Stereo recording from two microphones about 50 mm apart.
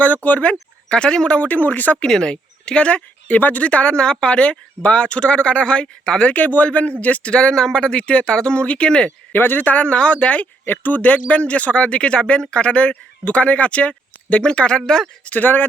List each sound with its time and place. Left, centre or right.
0.0 s speech: left
1.5 s speech: left
2.0 s speech: centre
6.3 s speech: left
9.3 s speech: left; by 15.1 s centre
15.2 s speech: left